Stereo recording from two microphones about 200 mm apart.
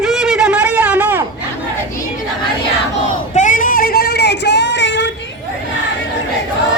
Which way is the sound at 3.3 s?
40° left (ahead or behind).